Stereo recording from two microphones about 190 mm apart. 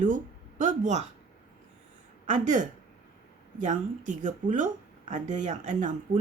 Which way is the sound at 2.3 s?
40° right (ahead or behind).